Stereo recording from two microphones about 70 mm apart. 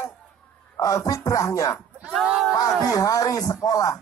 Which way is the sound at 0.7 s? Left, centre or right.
Left.